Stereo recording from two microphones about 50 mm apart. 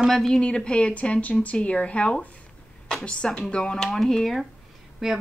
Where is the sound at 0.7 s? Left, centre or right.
Left; by 4.4 s centre.